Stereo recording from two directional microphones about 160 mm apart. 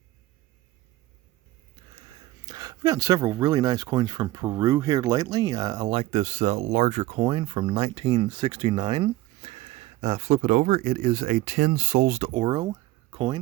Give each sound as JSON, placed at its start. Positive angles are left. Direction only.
{"t": 2.5, "sound": "speech", "side_deg": -25}
{"t": 12.3, "sound": "speech", "side_deg": -35}